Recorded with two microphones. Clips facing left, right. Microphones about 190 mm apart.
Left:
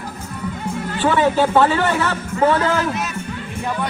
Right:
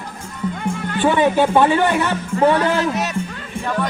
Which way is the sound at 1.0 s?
15° right (ahead or behind).